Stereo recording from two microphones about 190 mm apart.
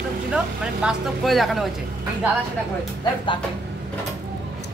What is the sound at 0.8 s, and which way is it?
Speech, centre (ahead or behind).